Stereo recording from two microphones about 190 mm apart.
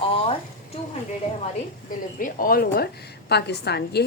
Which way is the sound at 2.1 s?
45° left (ahead or behind).